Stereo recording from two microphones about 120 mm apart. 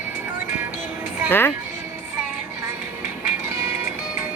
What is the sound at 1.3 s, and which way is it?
Speech, 20° left (ahead or behind).